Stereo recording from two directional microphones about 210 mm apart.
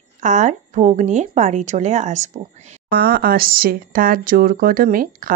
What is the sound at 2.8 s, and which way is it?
Speech, 45° right (ahead or behind).